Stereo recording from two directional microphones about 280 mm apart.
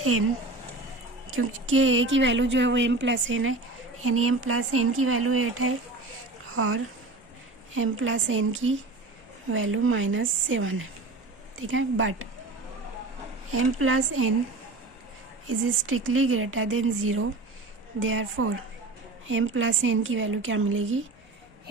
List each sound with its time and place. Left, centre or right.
0.0 s speech: right
1.3 s a woman's voice: right
13.5 s speech: right
15.4 s speech: right